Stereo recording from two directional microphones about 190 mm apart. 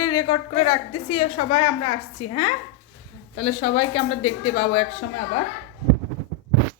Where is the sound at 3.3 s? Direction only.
30° left (ahead or behind).